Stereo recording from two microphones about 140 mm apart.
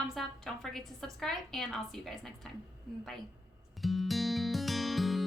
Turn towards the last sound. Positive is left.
turn(degrees=0)  # may be behind; listen again after turning